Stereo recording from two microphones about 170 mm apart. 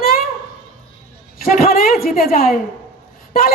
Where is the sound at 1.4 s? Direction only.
60° left (ahead or behind).